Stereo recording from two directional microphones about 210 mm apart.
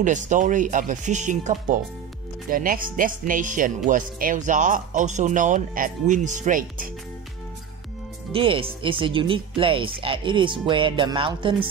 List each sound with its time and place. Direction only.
0.0 s speech: 35° right (ahead or behind)
8.3 s speech: 25° right (ahead or behind)